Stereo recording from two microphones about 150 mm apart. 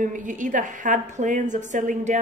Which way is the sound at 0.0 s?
60° right (ahead or behind).